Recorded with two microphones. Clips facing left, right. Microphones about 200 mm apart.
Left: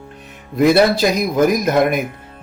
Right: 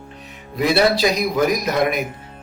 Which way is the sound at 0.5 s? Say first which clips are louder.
Left 4 dB; 50° left (ahead or behind).